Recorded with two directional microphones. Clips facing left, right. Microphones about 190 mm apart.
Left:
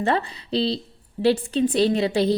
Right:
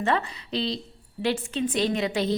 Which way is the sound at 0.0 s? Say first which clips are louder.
Left 3 dB; 35° left (ahead or behind).